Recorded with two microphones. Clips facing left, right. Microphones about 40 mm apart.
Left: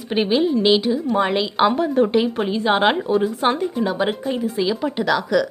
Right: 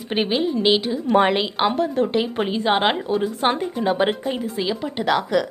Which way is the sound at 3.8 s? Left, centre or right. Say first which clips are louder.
Right 4 dB; right.